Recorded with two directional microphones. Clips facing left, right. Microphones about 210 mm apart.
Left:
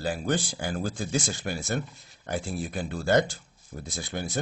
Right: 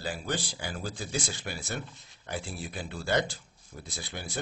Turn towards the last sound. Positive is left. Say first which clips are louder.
# left 7 dB
turn(degrees=45)  # may be behind; listen again after turning